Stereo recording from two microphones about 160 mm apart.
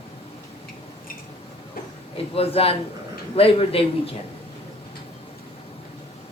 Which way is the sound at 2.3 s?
35° left (ahead or behind).